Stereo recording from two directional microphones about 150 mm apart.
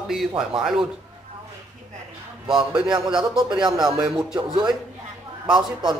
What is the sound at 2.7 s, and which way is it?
Speech, 5° right (ahead or behind).